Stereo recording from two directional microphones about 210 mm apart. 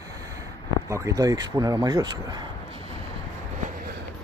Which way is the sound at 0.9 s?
15° right (ahead or behind).